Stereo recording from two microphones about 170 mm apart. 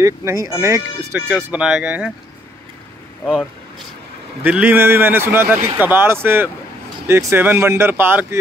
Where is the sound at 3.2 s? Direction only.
5° left (ahead or behind).